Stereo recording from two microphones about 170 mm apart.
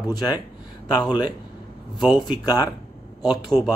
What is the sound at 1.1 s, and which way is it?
Speech, 25° left (ahead or behind).